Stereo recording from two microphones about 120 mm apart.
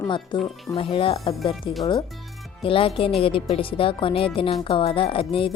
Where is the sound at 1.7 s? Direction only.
45° left (ahead or behind).